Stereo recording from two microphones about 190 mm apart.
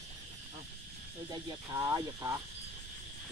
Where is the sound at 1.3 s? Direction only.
20° right (ahead or behind).